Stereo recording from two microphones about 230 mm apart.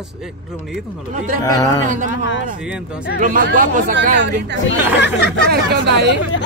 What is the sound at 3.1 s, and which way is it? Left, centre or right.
Speech, right.